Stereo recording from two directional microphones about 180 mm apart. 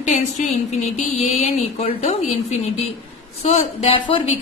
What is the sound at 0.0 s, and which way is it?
A woman's voice, 45° left (ahead or behind).